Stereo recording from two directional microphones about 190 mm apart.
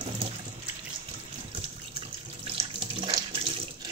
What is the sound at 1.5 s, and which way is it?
Water tap, 30° right (ahead or behind).